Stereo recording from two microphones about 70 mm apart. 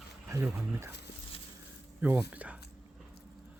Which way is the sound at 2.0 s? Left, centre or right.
Right.